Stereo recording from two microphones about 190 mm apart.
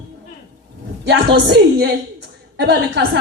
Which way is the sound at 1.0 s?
65° right (ahead or behind).